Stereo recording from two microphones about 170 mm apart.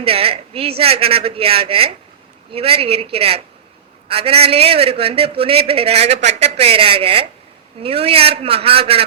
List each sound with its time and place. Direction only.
0.0 s a man's voice: 35° right (ahead or behind)